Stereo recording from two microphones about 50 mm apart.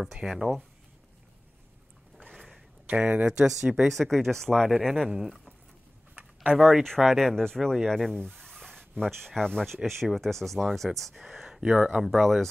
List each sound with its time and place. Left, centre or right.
0.0 s speech: centre
2.1 s a sound: centre
2.9 s speech: right
3.3 s speech: centre
3.9 s speech: centre
5.1 s speech: centre
6.5 s speech: centre